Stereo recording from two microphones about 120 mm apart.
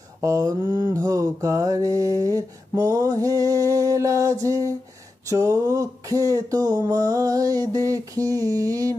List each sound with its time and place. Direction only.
0.2 s mantra: 30° right (ahead or behind)